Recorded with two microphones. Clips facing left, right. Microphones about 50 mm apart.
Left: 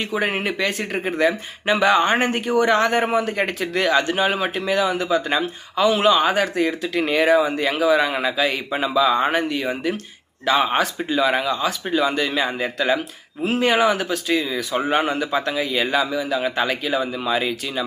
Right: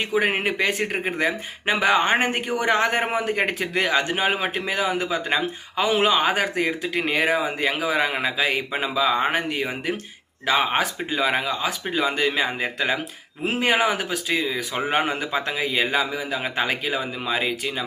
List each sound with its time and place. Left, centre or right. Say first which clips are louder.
0.1 s a man's voice: right 2 dB; centre